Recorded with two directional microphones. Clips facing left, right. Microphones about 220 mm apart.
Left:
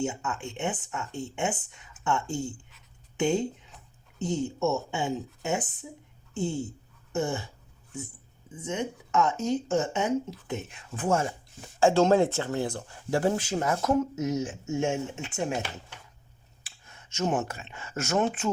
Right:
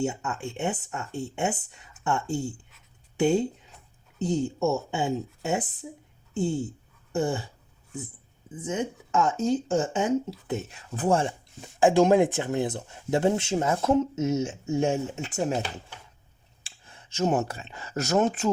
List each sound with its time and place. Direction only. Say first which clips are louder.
0.0 s speech: right 2 dB; 40° right (ahead or behind)
8.6 s speech: right 2 dB; 35° right (ahead or behind)
11.8 s speech: right 2 dB; 15° right (ahead or behind); by 15.6 s 40° right (ahead or behind)
16.6 s speech: right 2 dB; 30° right (ahead or behind)